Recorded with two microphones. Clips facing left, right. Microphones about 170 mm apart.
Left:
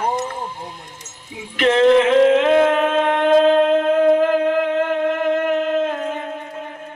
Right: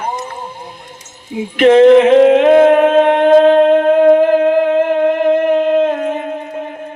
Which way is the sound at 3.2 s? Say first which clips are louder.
Right 4 dB; 55° right (ahead or behind).